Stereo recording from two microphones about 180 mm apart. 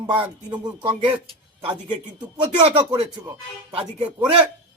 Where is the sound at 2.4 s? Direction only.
35° right (ahead or behind).